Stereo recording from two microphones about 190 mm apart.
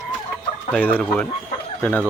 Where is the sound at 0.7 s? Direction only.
10° left (ahead or behind).